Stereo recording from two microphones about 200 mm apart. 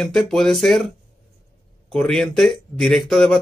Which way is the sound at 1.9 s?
Centre (ahead or behind).